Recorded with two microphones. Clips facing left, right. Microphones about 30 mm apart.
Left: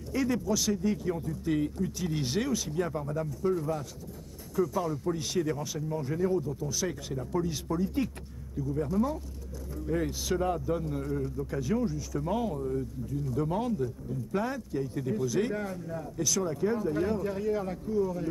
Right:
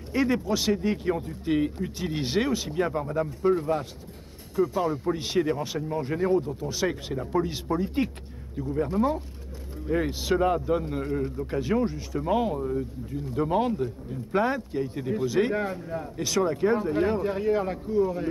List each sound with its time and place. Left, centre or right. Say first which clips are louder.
0.1 s a man's voice: right 4 dB; right